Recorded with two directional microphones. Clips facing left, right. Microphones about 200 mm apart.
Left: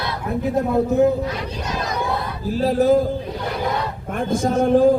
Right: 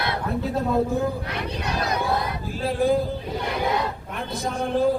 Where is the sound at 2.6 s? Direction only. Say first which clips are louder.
Left 5 dB; 40° left (ahead or behind).